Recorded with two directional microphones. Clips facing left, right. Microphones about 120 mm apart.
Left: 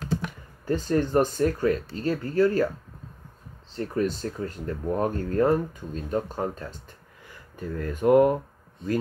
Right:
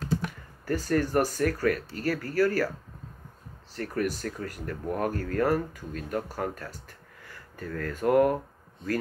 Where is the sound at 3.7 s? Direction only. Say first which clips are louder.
Left 3 dB; 25° left (ahead or behind).